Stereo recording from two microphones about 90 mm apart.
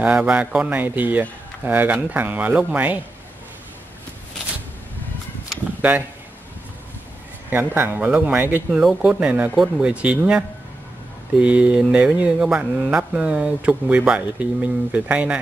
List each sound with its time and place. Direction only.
0.0 s speech: 15° right (ahead or behind)
5.8 s a sound: 20° right (ahead or behind)
7.4 s speech: 20° right (ahead or behind)
8.6 s speech: 5° right (ahead or behind)